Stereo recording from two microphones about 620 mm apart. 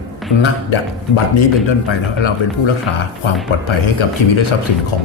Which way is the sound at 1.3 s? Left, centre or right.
Left.